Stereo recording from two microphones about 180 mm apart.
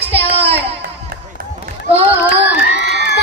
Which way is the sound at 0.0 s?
30° right (ahead or behind).